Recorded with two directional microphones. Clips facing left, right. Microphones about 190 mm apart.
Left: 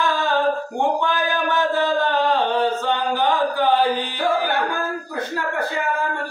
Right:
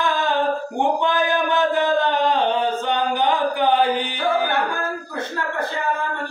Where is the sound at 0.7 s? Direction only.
20° right (ahead or behind).